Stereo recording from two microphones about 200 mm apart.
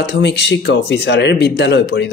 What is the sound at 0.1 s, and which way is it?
A man's voice, 60° left (ahead or behind).